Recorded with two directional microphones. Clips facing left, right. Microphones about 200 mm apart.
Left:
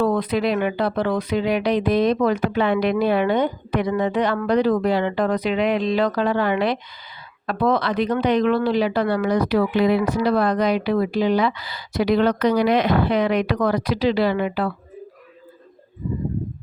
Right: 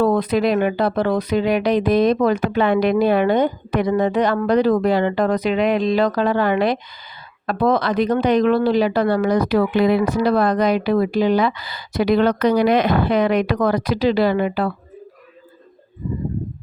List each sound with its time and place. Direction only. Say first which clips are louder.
0.0 s speech: right 3 dB; 40° right (ahead or behind)